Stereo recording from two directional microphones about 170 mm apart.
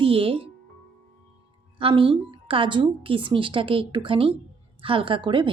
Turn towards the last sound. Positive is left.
turn(degrees=-30)  # may be behind; listen again after turning